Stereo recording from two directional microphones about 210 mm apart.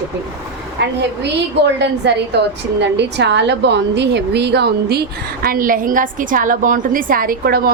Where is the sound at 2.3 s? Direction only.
55° right (ahead or behind).